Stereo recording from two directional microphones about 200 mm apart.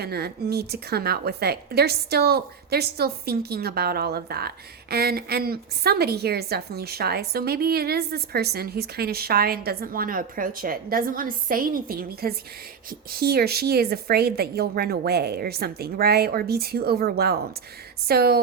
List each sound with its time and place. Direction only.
0.0 s a woman's voice: 50° right (ahead or behind)